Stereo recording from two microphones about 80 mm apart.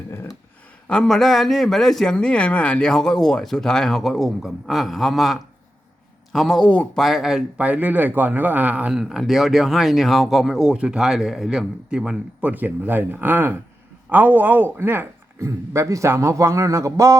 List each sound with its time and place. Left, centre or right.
0.9 s a man's voice: centre
6.9 s a man's voice: centre
7.6 s speech: centre
8.9 s a man's voice: centre
12.4 s a man's voice: right
15.4 s a man's voice: right